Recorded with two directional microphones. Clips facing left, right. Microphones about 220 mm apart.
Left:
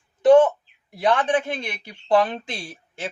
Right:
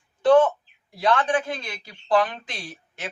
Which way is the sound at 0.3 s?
15° left (ahead or behind).